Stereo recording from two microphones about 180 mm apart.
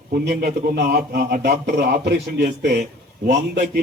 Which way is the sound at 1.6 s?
70° right (ahead or behind).